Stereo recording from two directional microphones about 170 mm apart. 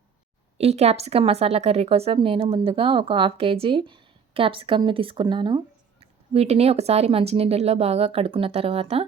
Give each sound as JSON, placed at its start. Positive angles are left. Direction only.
{"t": 0.6, "sound": "a woman's voice", "side_deg": -40}